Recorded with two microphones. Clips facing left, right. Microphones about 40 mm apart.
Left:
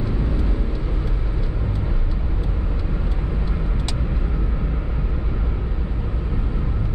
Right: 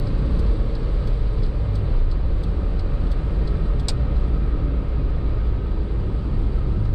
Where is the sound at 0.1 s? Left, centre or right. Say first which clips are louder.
Left 2 dB; left.